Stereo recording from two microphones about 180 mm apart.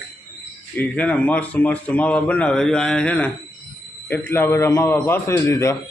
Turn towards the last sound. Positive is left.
turn(degrees=15)  # may be behind; listen again after turning